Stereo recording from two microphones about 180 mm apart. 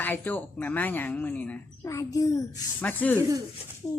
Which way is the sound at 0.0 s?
10° left (ahead or behind).